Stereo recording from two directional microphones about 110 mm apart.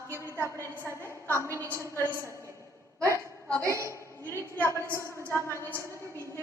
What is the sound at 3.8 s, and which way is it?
A woman's voice, 20° left (ahead or behind).